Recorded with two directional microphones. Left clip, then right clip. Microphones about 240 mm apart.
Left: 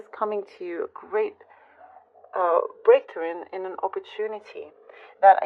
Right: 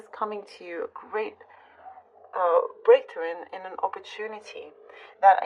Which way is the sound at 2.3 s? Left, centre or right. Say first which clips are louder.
Even; left.